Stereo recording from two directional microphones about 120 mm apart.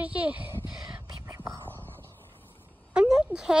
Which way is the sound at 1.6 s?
15° left (ahead or behind).